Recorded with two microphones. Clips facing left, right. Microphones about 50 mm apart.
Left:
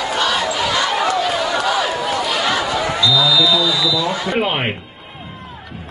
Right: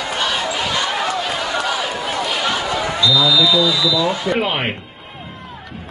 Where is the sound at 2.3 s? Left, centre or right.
Left.